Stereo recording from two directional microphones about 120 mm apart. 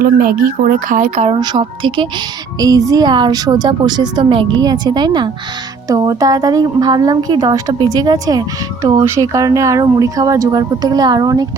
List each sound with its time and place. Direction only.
0.9 s speech: 90° right; by 1.4 s 65° right (ahead or behind)
1.4 s speech: 40° right (ahead or behind)